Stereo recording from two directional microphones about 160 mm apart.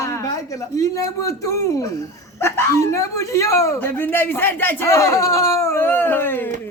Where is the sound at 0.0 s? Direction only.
20° left (ahead or behind).